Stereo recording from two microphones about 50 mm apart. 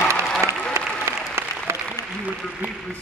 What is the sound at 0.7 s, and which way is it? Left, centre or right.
Applause, right.